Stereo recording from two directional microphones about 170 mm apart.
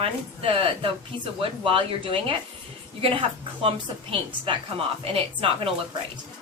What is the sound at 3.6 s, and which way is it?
A woman's voice, 30° right (ahead or behind).